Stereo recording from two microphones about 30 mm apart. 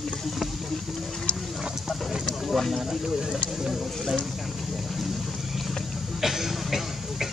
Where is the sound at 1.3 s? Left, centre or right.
Left.